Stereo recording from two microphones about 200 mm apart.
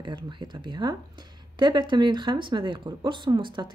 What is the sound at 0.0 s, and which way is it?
Speech, 20° right (ahead or behind).